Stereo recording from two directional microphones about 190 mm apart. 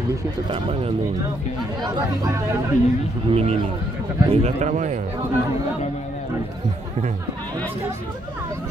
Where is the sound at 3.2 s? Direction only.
30° right (ahead or behind).